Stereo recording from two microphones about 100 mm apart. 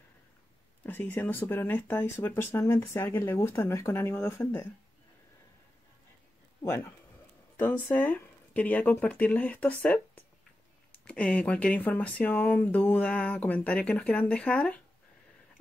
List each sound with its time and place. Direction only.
0.8 s speech: 20° left (ahead or behind)
6.6 s speech: 25° left (ahead or behind)
11.1 s speech: 10° left (ahead or behind)